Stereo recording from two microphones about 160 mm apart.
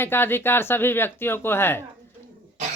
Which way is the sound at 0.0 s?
15° left (ahead or behind).